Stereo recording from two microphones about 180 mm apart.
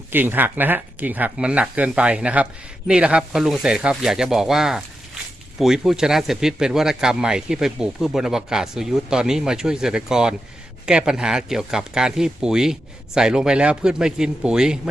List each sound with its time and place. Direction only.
0.1 s speech: 10° right (ahead or behind)